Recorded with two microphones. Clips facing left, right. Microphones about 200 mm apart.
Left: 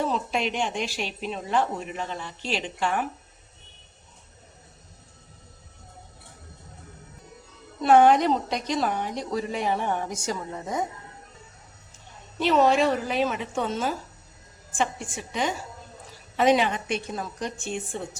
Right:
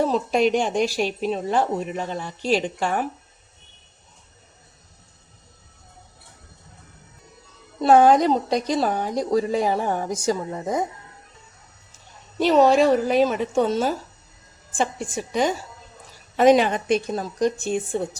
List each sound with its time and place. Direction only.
0.0 s a woman's voice: 40° right (ahead or behind)
7.8 s a woman's voice: 35° right (ahead or behind)
12.4 s a woman's voice: 40° right (ahead or behind)